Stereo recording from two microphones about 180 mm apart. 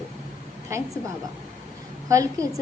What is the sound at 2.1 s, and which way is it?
Speech, 20° right (ahead or behind).